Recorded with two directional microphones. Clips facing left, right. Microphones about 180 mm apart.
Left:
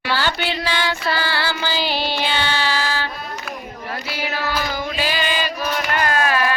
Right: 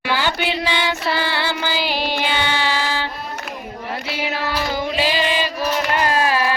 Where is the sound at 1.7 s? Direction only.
10° right (ahead or behind).